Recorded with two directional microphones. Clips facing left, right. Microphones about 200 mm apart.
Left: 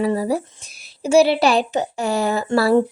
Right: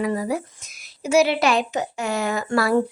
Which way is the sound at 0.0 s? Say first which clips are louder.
Left 4 dB; 30° left (ahead or behind).